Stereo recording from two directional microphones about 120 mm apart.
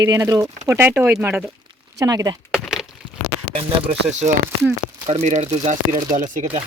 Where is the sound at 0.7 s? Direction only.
15° right (ahead or behind).